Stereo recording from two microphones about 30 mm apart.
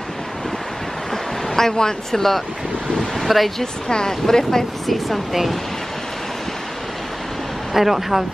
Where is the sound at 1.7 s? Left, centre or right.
Left.